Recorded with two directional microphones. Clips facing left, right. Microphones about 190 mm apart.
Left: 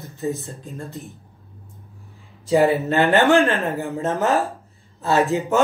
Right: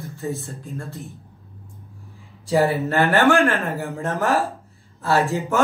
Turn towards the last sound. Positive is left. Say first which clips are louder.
# left 2 dB
turn(degrees=20)  # may be behind; listen again after turning